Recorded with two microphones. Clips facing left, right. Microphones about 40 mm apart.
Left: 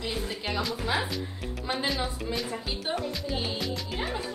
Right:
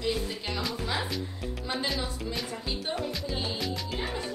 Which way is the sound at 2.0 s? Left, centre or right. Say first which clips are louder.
Left 2 dB; centre.